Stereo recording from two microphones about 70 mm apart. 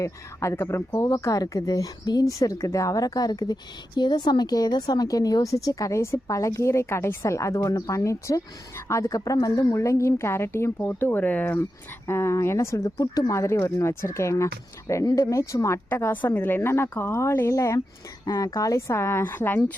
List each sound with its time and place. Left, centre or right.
0.0 s a woman's voice: left
1.1 s a woman's voice: left
2.4 s a woman's voice: left
12.0 s speech: left
13.3 s speech: left
16.3 s a woman's voice: left
18.9 s a woman's voice: left